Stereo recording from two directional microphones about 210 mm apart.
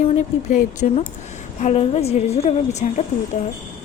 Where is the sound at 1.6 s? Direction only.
30° left (ahead or behind).